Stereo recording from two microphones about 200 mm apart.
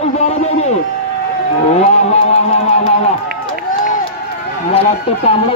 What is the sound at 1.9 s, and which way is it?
Speech, 30° left (ahead or behind).